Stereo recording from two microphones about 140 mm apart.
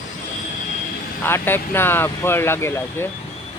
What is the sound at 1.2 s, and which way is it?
Speech, 15° left (ahead or behind).